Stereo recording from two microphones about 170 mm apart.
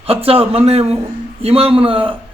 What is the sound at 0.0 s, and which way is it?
A man's voice, 35° right (ahead or behind).